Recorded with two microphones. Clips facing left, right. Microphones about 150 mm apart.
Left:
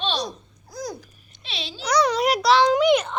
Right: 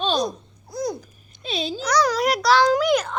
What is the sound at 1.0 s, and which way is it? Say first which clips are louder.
Speech: right 4 dB; 45° right (ahead or behind).